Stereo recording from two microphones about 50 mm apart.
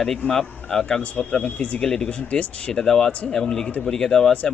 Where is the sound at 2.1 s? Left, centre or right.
Left.